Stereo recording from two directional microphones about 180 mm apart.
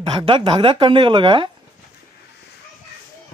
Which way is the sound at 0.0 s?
30° right (ahead or behind).